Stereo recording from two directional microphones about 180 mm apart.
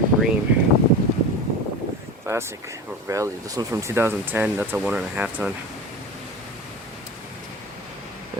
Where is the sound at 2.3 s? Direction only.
15° right (ahead or behind).